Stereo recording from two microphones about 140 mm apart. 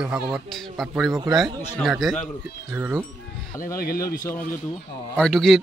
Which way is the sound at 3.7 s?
90° left.